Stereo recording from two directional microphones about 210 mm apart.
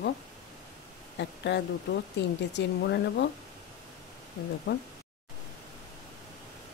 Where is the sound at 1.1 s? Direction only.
55° left (ahead or behind).